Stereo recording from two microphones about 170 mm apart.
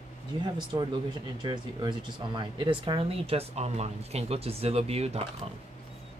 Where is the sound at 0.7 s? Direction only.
20° right (ahead or behind); by 5.2 s 35° right (ahead or behind).